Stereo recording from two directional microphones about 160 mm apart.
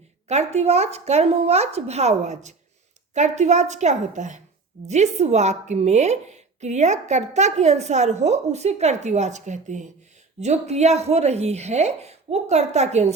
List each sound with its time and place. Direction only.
0.3 s a woman's voice: 45° right (ahead or behind)